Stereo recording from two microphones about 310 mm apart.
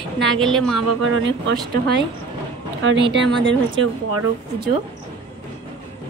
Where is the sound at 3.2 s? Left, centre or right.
Right.